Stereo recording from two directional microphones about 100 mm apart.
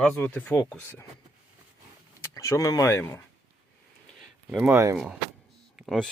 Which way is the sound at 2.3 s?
30° left (ahead or behind).